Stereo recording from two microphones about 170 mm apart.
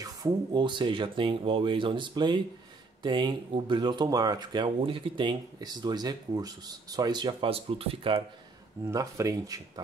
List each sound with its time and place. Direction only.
0.0 s speech: 25° right (ahead or behind)
8.9 s speech: 20° right (ahead or behind)